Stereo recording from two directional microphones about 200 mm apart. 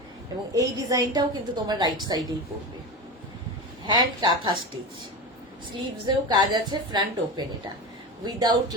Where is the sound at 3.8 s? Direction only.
20° right (ahead or behind).